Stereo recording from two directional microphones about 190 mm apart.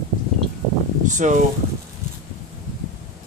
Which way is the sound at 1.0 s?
40° right (ahead or behind).